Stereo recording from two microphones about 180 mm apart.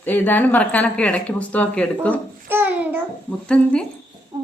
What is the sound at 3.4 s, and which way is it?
Speech, 5° left (ahead or behind).